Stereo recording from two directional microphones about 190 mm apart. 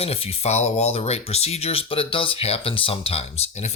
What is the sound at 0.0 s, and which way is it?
Speech, 30° left (ahead or behind).